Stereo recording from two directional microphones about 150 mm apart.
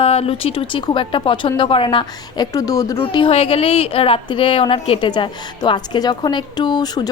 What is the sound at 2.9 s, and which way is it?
A woman's voice, 35° left (ahead or behind).